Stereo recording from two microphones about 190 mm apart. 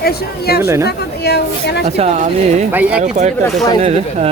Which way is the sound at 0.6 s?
15° right (ahead or behind).